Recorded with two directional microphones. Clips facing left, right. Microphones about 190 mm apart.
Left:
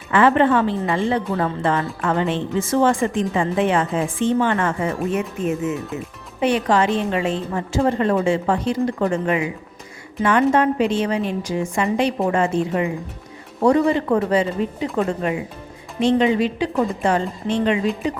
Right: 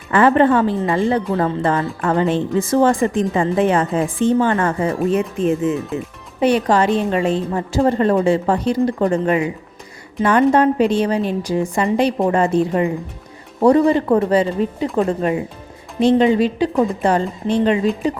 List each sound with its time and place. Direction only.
0.1 s a woman's voice: 40° right (ahead or behind)